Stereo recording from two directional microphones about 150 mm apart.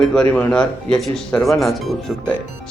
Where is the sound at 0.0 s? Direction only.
5° left (ahead or behind).